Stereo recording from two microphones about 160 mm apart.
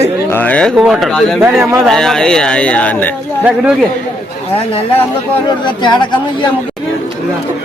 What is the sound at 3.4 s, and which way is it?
Speech, 5° right (ahead or behind).